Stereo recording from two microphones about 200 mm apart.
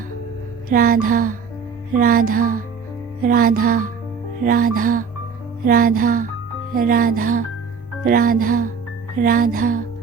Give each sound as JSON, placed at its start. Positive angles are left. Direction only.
{"t": 0.7, "sound": "music", "side_deg": -45}